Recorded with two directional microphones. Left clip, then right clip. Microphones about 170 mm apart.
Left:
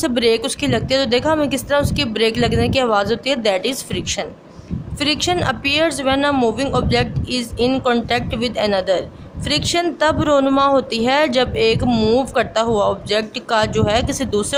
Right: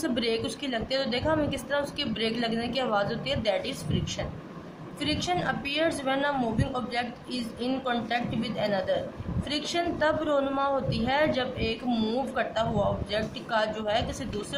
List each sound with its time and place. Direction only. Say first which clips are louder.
0.0 s a man's voice: left 12 dB; 55° left (ahead or behind)